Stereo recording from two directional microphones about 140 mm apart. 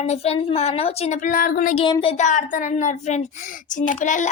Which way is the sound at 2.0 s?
45° left (ahead or behind).